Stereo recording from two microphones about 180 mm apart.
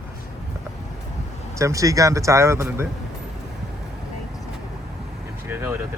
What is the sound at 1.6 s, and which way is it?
Speech, 15° right (ahead or behind).